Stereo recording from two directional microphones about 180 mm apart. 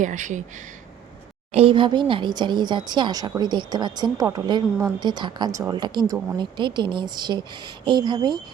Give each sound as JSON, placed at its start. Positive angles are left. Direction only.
{"t": 0.0, "sound": "speech", "side_deg": -45}
{"t": 1.5, "sound": "speech", "side_deg": -30}